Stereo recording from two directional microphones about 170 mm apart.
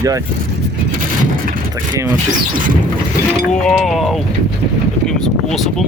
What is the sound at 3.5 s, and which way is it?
Speech, 5° left (ahead or behind).